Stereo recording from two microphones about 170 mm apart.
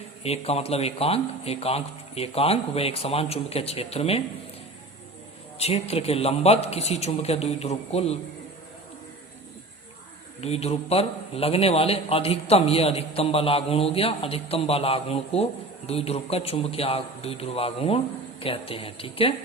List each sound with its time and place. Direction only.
0.2 s a man's voice: 35° left (ahead or behind)
5.5 s a man's voice: 35° left (ahead or behind)
10.4 s a man's voice: 35° left (ahead or behind)